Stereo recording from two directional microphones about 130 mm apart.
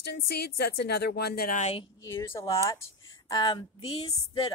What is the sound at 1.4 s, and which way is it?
Speech, 70° left (ahead or behind).